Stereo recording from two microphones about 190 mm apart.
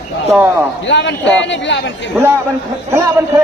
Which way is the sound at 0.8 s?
70° left (ahead or behind).